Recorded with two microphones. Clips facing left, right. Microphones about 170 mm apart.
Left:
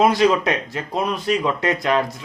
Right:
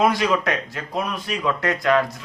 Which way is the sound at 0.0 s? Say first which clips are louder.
Left 3 dB; 25° left (ahead or behind).